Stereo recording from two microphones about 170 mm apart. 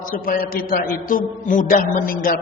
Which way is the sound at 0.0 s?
55° left (ahead or behind).